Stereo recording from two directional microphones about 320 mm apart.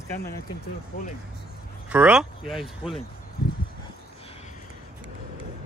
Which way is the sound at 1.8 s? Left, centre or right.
Centre.